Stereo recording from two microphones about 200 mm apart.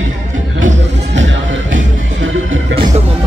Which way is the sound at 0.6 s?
70° right (ahead or behind).